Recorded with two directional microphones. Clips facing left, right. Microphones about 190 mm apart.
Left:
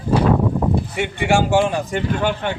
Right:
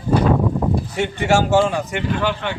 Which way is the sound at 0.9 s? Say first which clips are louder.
Right 3 dB; 15° left (ahead or behind).